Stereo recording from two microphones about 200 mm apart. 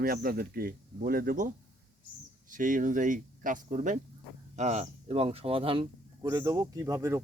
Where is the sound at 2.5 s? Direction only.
40° right (ahead or behind); by 7.2 s 15° right (ahead or behind).